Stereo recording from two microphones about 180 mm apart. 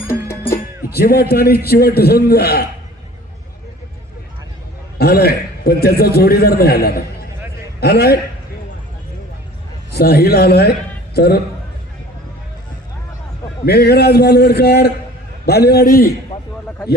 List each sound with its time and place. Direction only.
0.9 s a man's voice: 60° left (ahead or behind)
4.9 s a man's voice: 60° left (ahead or behind)
9.9 s a man's voice: 65° left (ahead or behind)
13.7 s a man's voice: 60° left (ahead or behind)